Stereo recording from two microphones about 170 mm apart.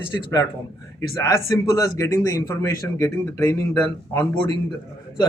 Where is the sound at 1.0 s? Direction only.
20° left (ahead or behind).